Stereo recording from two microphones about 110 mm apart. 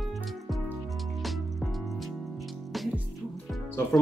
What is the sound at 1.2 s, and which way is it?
Music, centre (ahead or behind).